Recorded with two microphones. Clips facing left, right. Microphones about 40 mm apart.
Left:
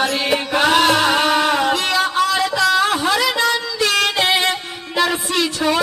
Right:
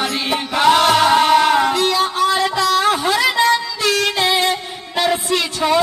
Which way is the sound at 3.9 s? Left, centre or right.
Left.